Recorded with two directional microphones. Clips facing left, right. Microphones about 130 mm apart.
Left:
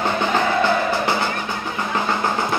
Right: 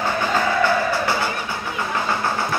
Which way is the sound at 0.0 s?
20° left (ahead or behind).